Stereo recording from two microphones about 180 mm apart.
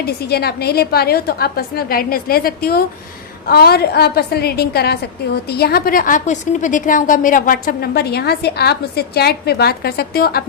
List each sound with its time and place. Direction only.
0.0 s a woman's voice: 60° left (ahead or behind)